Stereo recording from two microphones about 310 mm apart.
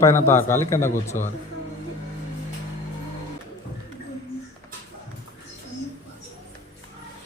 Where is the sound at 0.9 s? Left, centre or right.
Left.